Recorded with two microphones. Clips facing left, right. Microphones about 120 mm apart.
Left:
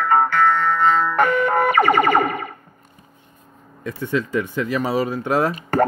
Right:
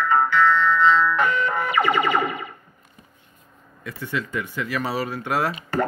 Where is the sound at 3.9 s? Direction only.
25° left (ahead or behind).